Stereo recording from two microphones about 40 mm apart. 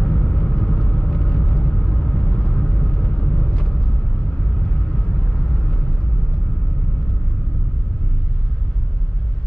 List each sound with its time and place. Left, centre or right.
0.0 s vehicle: left